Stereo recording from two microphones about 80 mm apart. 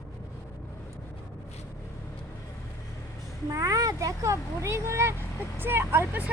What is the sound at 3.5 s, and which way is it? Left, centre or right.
Speech, right.